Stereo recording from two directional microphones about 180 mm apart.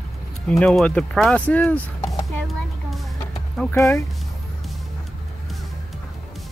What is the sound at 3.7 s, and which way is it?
Speech, 15° left (ahead or behind).